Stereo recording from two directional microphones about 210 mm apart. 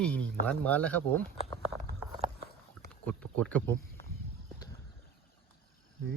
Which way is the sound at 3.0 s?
5° left (ahead or behind).